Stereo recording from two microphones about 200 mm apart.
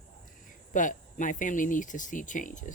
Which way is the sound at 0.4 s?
40° left (ahead or behind).